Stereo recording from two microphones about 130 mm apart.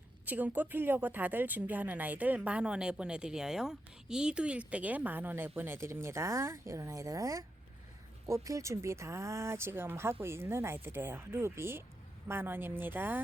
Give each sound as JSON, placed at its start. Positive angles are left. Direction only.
{"t": 0.3, "sound": "a woman's voice", "side_deg": -15}